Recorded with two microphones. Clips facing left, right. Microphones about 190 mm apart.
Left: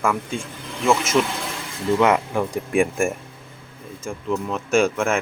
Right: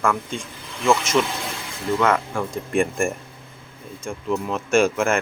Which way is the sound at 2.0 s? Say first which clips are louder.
Left 2 dB; 20° left (ahead or behind).